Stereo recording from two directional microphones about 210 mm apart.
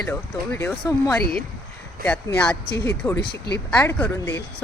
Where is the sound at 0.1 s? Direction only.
10° left (ahead or behind).